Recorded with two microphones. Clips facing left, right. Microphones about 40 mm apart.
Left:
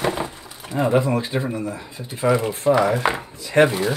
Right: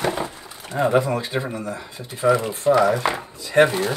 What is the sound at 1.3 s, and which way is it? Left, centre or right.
Speech, centre.